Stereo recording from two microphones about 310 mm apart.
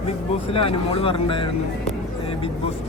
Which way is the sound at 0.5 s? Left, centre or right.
Centre.